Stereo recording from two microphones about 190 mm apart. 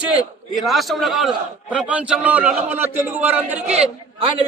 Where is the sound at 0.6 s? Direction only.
Centre (ahead or behind).